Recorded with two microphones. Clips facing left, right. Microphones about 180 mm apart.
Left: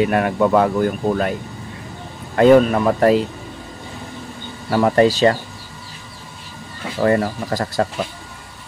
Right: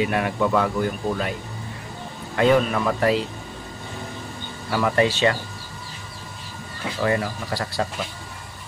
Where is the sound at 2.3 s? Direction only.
45° left (ahead or behind).